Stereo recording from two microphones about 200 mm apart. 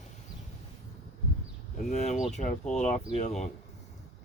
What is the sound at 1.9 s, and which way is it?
Speech, 35° left (ahead or behind).